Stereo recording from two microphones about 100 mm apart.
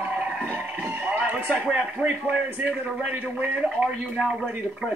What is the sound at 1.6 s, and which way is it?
Speech, 15° right (ahead or behind).